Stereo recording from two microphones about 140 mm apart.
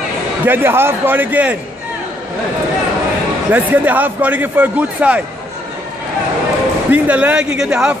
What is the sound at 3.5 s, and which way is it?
A man's voice, 10° right (ahead or behind).